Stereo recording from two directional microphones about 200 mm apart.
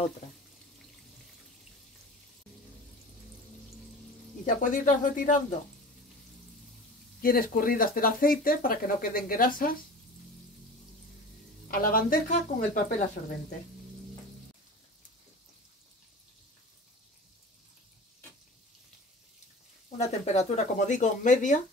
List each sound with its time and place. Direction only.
4.5 s speech: 40° left (ahead or behind)
7.2 s speech: 45° left (ahead or behind)
11.7 s speech: 45° left (ahead or behind)
20.0 s speech: 30° left (ahead or behind)